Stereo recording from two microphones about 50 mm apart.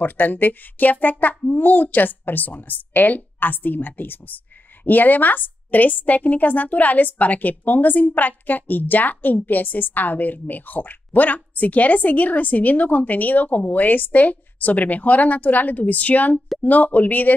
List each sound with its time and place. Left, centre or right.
0.0 s a woman's voice: left